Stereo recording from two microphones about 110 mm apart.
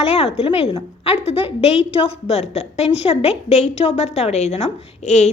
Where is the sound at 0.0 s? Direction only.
65° left (ahead or behind).